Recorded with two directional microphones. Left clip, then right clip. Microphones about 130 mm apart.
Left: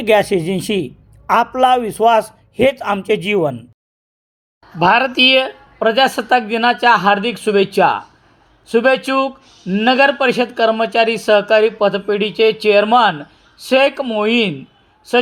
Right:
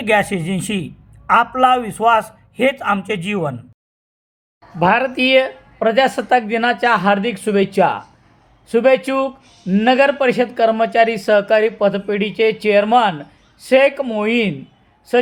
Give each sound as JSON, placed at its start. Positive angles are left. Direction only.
{"t": 0.0, "sound": "speech", "side_deg": 20}
{"t": 4.8, "sound": "speech", "side_deg": 45}